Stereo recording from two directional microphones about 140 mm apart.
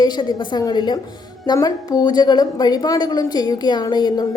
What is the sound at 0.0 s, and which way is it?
A woman's voice, 30° left (ahead or behind).